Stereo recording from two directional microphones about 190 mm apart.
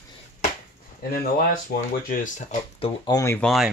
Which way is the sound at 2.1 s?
40° left (ahead or behind).